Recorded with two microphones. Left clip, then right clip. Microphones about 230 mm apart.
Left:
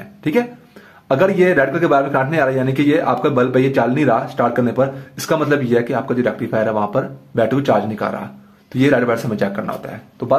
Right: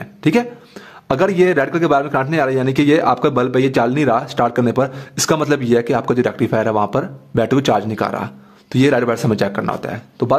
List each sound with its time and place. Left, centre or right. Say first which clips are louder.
0.2 s a man's voice: right 2 dB; right